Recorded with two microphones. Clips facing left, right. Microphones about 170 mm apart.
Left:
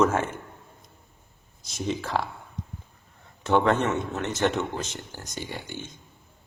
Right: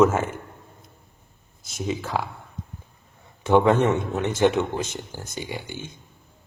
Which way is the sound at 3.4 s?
10° right (ahead or behind).